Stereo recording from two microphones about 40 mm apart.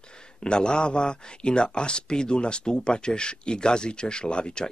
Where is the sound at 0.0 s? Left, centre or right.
Left.